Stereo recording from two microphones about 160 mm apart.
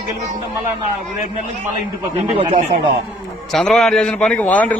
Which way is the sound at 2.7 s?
50° right (ahead or behind).